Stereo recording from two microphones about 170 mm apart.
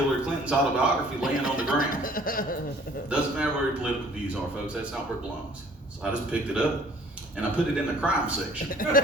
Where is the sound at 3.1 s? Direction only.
5° right (ahead or behind).